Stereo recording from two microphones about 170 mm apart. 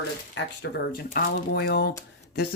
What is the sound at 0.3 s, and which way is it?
Speech, 75° left (ahead or behind).